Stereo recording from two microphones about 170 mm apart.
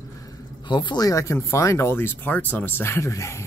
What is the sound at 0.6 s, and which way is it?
Speech, 25° left (ahead or behind).